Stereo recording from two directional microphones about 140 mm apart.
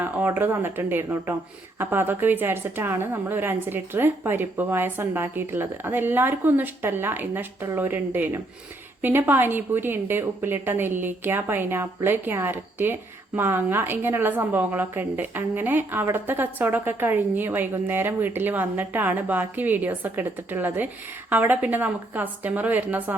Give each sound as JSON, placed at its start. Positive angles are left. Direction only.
{"t": 0.0, "sound": "a woman's voice", "side_deg": -15}